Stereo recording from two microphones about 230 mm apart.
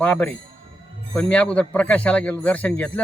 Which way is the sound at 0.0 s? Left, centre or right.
Centre.